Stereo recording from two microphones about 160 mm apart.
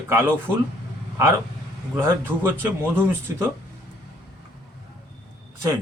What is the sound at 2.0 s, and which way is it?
Speech, 15° right (ahead or behind).